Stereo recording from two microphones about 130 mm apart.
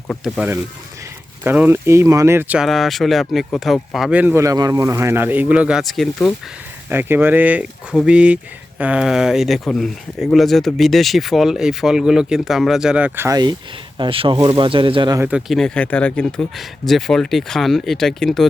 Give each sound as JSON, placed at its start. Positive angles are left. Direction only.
{"t": 0.3, "sound": "speech", "side_deg": -15}
{"t": 2.6, "sound": "speech", "side_deg": 0}
{"t": 4.2, "sound": "speech", "side_deg": -10}
{"t": 4.4, "sound": "speech", "side_deg": -25}
{"t": 6.9, "sound": "speech", "side_deg": -15}
{"t": 13.1, "sound": "speech", "side_deg": -20}
{"t": 14.0, "sound": "speech", "side_deg": -40}
{"t": 15.3, "sound": "speech", "side_deg": -5}